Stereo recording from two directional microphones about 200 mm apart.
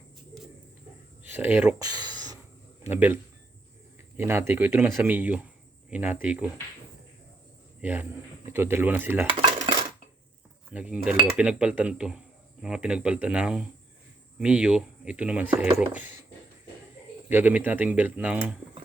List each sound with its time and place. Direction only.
1.2 s speech: 10° right (ahead or behind)
2.0 s a sound: 20° right (ahead or behind)
2.8 s speech: 10° right (ahead or behind)
4.2 s speech: 10° right (ahead or behind)
7.8 s a man's voice: 10° right (ahead or behind)
10.7 s speech: 5° right (ahead or behind)
17.2 s speech: 10° right (ahead or behind)